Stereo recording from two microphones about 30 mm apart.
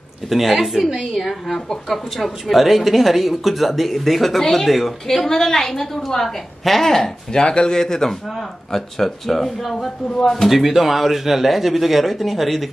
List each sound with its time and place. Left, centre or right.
0.3 s speech: centre
0.6 s a woman's voice: centre
1.1 s a woman's voice: centre
4.6 s speech: centre
5.1 s a woman's voice: centre
6.6 s speech: centre
7.3 s speech: left
7.8 s a woman's voice: centre
10.5 s speech: centre